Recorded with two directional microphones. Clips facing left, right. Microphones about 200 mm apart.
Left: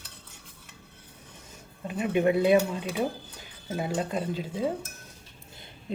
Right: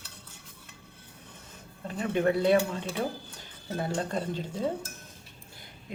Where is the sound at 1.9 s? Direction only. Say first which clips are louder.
Left 2 dB; 15° left (ahead or behind).